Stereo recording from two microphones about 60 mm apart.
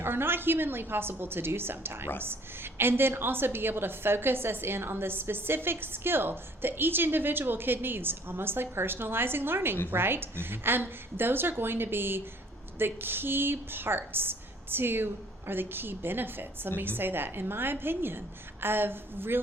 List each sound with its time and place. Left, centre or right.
0.0 s a woman's voice: right